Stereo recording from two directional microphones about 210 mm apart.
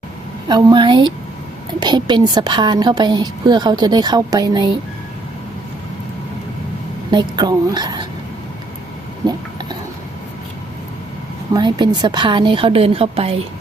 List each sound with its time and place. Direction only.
0.4 s a woman's voice: 20° right (ahead or behind)
7.1 s a woman's voice: 20° right (ahead or behind)
9.2 s a woman's voice: 20° right (ahead or behind)
11.5 s a woman's voice: 20° right (ahead or behind)